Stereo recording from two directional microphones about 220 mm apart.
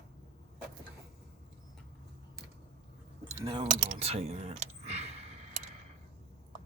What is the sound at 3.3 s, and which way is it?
Typing, 20° right (ahead or behind).